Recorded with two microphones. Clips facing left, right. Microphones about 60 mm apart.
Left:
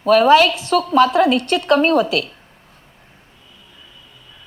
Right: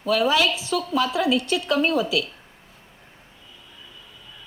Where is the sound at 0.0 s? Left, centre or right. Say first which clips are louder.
Left 9 dB; left.